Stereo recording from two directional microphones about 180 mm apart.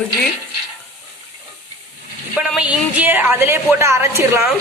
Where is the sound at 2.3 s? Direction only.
5° right (ahead or behind).